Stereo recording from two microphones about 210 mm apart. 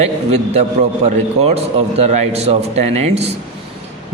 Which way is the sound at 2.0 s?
30° right (ahead or behind).